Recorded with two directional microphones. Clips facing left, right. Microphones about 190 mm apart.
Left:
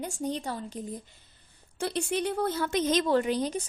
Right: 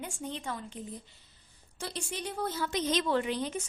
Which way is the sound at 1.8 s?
60° left (ahead or behind).